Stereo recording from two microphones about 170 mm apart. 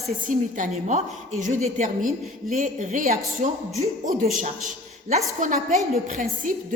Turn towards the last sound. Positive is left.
turn(degrees=-50)  # may be behind; listen again after turning